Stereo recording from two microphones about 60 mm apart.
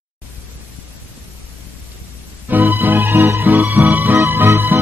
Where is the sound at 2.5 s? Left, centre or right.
Right.